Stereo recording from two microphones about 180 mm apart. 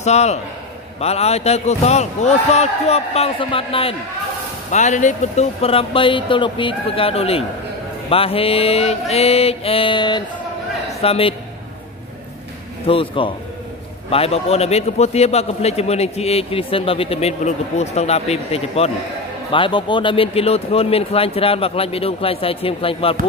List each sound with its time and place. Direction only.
0.0 s a man's voice: 40° left (ahead or behind)
4.6 s a man's voice: 40° left (ahead or behind)
12.8 s a man's voice: 30° left (ahead or behind)